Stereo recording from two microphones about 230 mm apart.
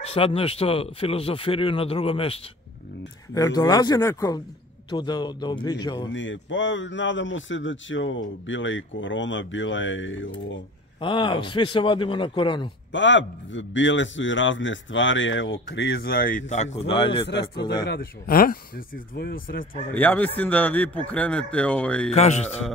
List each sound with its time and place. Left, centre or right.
0.0 s speech: left
6.0 s speech: left
11.0 s speech: left
12.9 s a man's voice: left; by 17.8 s centre
17.8 s a man's voice: left
19.9 s a man's voice: centre
22.1 s speech: left